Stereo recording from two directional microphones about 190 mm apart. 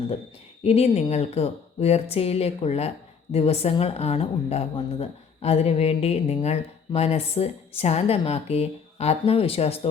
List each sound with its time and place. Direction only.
0.6 s a woman's voice: 30° left (ahead or behind)